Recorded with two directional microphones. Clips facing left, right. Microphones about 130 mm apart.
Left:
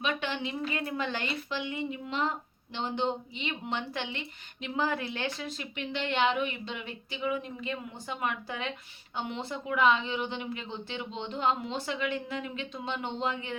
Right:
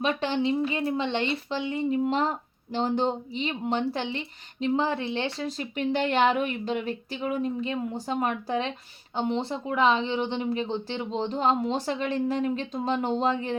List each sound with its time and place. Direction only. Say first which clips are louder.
0.0 s a woman's voice: right 7 dB; 35° right (ahead or behind)